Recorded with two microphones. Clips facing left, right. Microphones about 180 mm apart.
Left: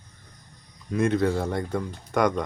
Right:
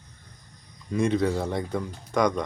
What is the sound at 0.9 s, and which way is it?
Speech, centre (ahead or behind).